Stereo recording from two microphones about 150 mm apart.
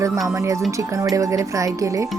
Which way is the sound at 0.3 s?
20° right (ahead or behind).